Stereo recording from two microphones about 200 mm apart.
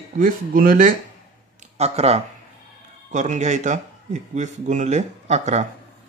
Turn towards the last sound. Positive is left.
turn(degrees=-35)  # may be behind; listen again after turning